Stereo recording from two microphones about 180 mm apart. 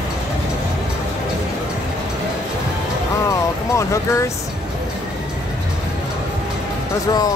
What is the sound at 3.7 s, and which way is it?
Speech, 15° left (ahead or behind).